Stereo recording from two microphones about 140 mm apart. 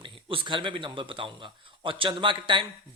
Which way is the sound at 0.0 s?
35° right (ahead or behind).